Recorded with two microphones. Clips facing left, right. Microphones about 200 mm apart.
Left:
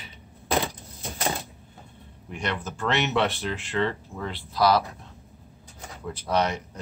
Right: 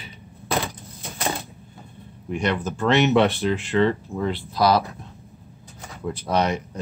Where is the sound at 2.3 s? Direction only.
15° right (ahead or behind).